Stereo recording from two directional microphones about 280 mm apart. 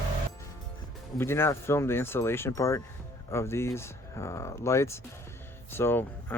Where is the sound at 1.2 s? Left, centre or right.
Centre.